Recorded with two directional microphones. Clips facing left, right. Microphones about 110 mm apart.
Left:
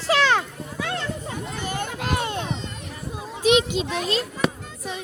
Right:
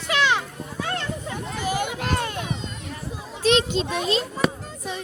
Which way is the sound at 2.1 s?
20° left (ahead or behind).